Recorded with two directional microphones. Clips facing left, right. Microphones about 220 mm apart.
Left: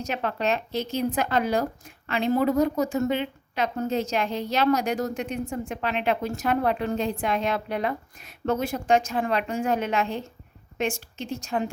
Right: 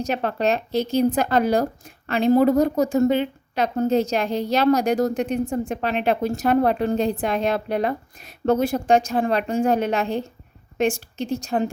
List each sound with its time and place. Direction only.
0.0 s a woman's voice: 35° right (ahead or behind)